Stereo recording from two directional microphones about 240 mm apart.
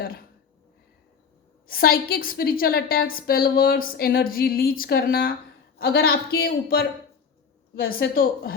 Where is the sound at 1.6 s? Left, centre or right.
Left.